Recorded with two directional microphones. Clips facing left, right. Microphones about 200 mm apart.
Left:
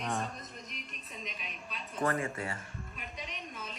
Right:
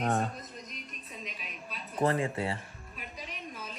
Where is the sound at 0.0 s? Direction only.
50° right (ahead or behind).